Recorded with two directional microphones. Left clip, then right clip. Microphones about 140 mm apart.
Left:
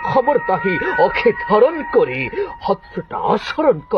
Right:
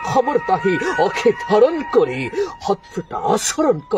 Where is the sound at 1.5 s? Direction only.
50° right (ahead or behind).